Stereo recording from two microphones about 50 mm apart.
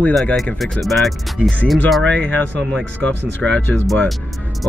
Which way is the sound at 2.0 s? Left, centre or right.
Left.